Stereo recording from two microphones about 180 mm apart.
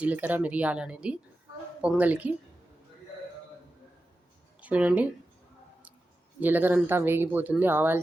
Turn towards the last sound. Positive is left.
turn(degrees=-10)  # may be behind; listen again after turning